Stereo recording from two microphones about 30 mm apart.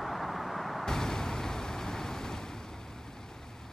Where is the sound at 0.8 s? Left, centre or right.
Centre.